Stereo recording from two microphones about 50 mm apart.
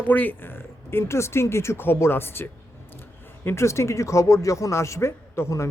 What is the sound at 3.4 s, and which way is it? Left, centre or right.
Speech, left.